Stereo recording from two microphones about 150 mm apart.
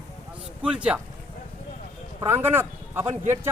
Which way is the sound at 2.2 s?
15° right (ahead or behind).